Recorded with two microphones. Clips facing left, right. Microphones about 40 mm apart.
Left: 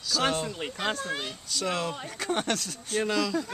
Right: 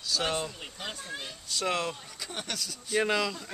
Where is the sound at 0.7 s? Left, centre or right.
Left.